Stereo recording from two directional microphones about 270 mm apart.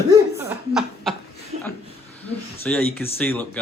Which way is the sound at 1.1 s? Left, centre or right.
Centre.